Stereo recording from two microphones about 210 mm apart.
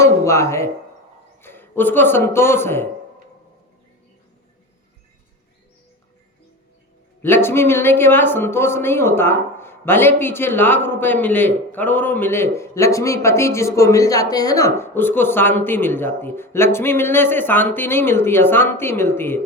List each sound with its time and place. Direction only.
0.0 s a man's voice: 15° left (ahead or behind)
7.2 s speech: 10° left (ahead or behind)